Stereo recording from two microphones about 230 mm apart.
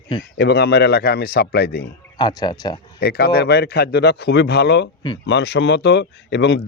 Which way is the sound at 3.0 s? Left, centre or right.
Left.